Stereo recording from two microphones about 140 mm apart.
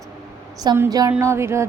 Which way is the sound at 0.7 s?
20° right (ahead or behind).